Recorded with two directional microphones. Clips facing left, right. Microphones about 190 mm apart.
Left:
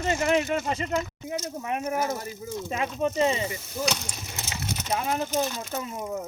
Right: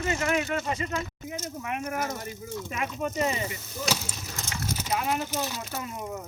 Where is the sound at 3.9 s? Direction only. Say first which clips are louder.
Even; 5° right (ahead or behind).